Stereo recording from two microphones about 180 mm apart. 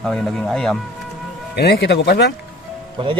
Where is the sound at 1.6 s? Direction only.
65° left (ahead or behind).